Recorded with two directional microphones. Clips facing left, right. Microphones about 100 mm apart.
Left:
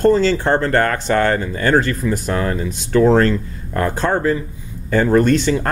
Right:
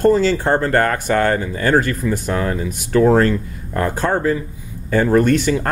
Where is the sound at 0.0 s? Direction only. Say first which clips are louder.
Even; 15° right (ahead or behind).